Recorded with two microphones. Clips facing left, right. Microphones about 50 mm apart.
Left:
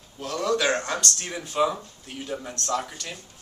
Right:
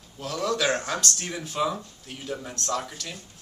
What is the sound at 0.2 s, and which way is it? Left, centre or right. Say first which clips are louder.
Speech: left 2 dB; centre.